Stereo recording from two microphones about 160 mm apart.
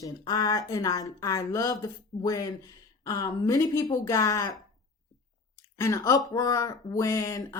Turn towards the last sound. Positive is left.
turn(degrees=20)  # may be behind; listen again after turning